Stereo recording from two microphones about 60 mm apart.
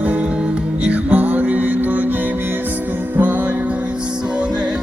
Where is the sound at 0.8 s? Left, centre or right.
Right.